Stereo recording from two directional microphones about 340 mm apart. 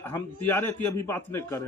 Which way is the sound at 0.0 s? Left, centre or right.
Centre.